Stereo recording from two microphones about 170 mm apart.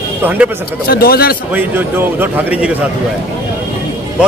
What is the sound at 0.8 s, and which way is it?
Speech, 65° left (ahead or behind).